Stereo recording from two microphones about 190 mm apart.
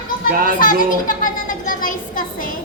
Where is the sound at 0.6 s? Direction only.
45° left (ahead or behind).